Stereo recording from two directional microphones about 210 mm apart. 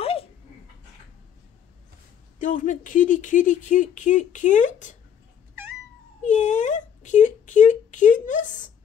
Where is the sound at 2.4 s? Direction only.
40° left (ahead or behind).